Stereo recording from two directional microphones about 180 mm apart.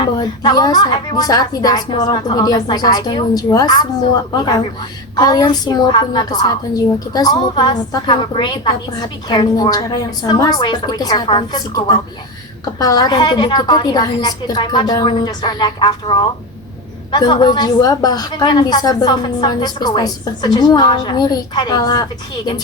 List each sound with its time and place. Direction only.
0.0 s a woman's voice: 25° left (ahead or behind)